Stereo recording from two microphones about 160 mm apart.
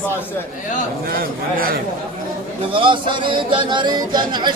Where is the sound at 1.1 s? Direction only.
65° right (ahead or behind).